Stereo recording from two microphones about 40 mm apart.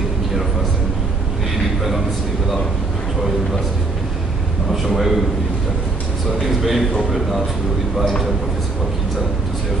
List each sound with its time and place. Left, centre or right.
4.8 s a man's voice: centre
6.4 s a man's voice: centre